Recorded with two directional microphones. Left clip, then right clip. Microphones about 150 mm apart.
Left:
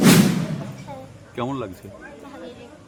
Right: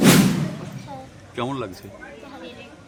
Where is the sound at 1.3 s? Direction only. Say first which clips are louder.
Even; 5° left (ahead or behind).